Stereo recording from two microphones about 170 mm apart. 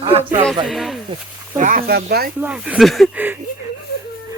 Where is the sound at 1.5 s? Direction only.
50° right (ahead or behind).